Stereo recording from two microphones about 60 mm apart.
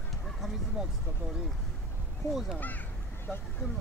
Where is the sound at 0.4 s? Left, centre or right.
Centre.